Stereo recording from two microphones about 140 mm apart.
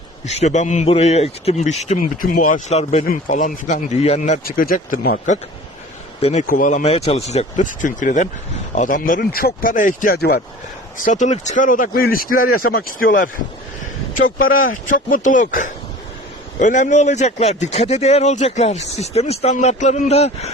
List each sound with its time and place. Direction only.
0.3 s speech: 55° left (ahead or behind)
0.9 s a man's voice: 45° left (ahead or behind)
2.3 s speech: 70° left (ahead or behind); by 3.1 s 55° left (ahead or behind)
3.1 s speech: 65° left (ahead or behind)
6.5 s speech: 70° left (ahead or behind)
6.8 s speech: 45° left (ahead or behind); by 9.5 s 85° left
9.6 s speech: 75° left (ahead or behind); by 10.4 s 90° left
10.9 s speech: 65° left (ahead or behind); by 13.3 s 90° left
14.2 s a man's voice: 75° left (ahead or behind); by 20.5 s 50° left (ahead or behind)